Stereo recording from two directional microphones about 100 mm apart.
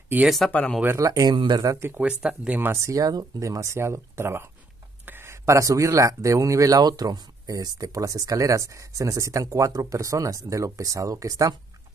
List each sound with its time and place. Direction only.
0.5 s speech: 15° left (ahead or behind)
0.9 s speech: 35° right (ahead or behind)
1.7 s speech: 25° right (ahead or behind)
2.0 s speech: 10° right (ahead or behind); by 11.5 s 35° right (ahead or behind)